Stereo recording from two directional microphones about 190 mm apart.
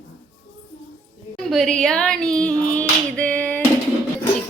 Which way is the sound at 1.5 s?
Centre (ahead or behind).